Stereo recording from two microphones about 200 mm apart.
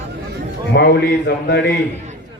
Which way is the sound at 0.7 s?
55° left (ahead or behind).